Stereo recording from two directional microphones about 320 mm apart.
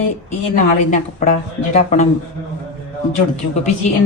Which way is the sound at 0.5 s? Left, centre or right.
Left.